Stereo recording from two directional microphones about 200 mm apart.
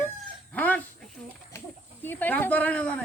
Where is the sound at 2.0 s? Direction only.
10° left (ahead or behind).